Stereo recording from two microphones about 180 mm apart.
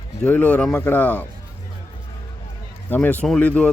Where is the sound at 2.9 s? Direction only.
10° left (ahead or behind).